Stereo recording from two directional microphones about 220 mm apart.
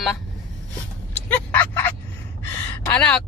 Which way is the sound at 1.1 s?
5° left (ahead or behind).